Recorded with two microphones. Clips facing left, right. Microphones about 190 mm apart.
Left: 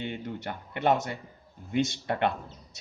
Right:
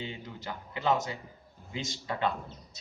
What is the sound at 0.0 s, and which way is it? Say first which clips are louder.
Speech: left 5 dB; 60° left (ahead or behind).